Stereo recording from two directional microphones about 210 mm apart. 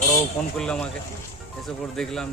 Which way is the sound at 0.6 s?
5° left (ahead or behind).